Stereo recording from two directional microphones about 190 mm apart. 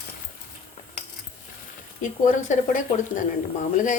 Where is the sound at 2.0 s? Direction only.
40° left (ahead or behind).